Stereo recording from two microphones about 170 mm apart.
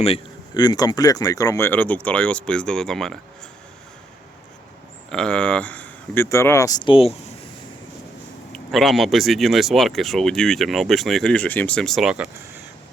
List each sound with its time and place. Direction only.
0.5 s speech: 25° left (ahead or behind); by 3.2 s 5° left (ahead or behind)
5.1 s speech: 5° left (ahead or behind); by 7.1 s 30° left (ahead or behind)
8.5 s speech: centre (ahead or behind)